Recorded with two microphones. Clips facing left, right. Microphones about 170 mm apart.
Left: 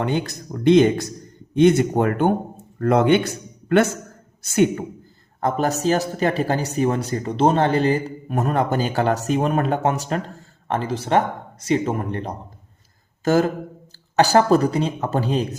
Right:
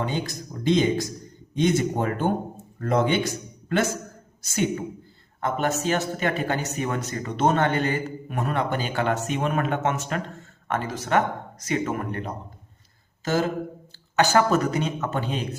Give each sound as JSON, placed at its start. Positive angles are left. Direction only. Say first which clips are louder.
{"t": 0.0, "sound": "speech", "louder": "left 5 dB", "side_deg": 60}
{"t": 5.4, "sound": "speech", "louder": "left 4 dB", "side_deg": 40}
{"t": 13.2, "sound": "speech", "louder": "left 7 dB", "side_deg": 50}
{"t": 14.2, "sound": "speech", "louder": "left 4 dB", "side_deg": 35}